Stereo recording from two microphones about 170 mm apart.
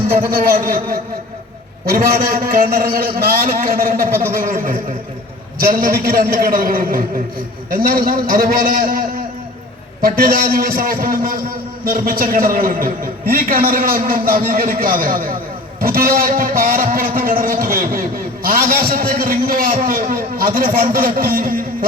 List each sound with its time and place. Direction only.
0.1 s a man's voice: 60° right (ahead or behind)